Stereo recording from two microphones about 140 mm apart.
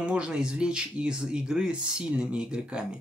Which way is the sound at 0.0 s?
5° right (ahead or behind).